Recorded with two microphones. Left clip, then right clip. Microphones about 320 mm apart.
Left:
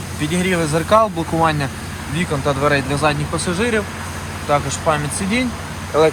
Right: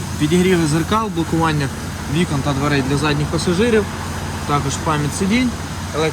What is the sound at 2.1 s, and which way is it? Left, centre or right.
Speech, centre.